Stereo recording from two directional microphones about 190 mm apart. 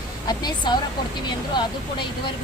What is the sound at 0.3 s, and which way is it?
Speech, 25° left (ahead or behind).